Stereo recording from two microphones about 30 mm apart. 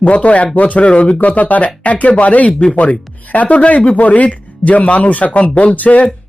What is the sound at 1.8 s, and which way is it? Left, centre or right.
Speech, left.